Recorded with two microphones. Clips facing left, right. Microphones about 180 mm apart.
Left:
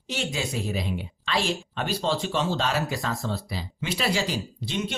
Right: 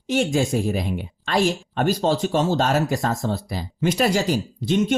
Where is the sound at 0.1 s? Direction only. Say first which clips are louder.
Right 10 dB; 50° right (ahead or behind).